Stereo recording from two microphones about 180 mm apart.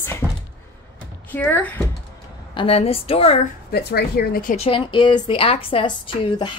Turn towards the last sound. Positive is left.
turn(degrees=25)  # may be behind; listen again after turning